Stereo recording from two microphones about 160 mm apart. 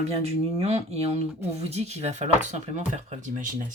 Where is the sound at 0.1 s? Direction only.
40° right (ahead or behind).